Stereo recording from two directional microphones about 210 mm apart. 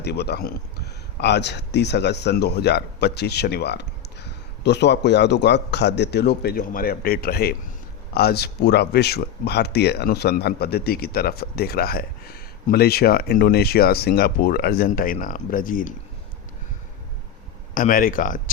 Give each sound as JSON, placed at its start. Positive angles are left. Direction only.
{"t": 0.0, "sound": "speech", "side_deg": 50}
{"t": 17.7, "sound": "speech", "side_deg": 40}